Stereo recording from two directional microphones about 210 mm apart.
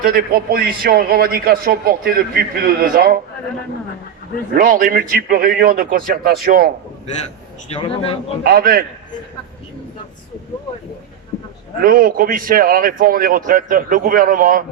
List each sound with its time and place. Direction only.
0.0 s a man's voice: 45° right (ahead or behind)
4.5 s a man's voice: 40° right (ahead or behind)
7.7 s a man's voice: 25° left (ahead or behind)
8.4 s a man's voice: 45° right (ahead or behind)
11.8 s a man's voice: 45° right (ahead or behind)